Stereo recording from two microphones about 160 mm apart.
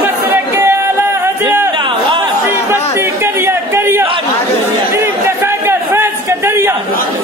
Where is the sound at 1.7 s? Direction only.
30° right (ahead or behind).